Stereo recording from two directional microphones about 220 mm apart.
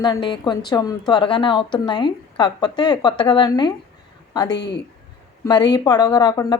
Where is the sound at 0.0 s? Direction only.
20° left (ahead or behind).